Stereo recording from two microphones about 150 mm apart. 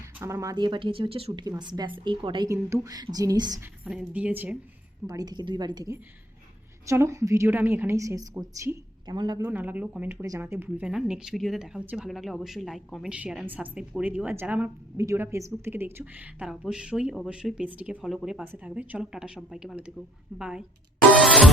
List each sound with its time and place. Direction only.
0.2 s speech: 20° right (ahead or behind)
2.5 s a woman's voice: 20° right (ahead or behind)
3.8 s a woman's voice: 5° right (ahead or behind)
5.0 s a woman's voice: 25° right (ahead or behind)
9.4 s a woman's voice: 10° right (ahead or behind)
10.1 s a woman's voice: 20° right (ahead or behind)
21.2 s music: centre (ahead or behind)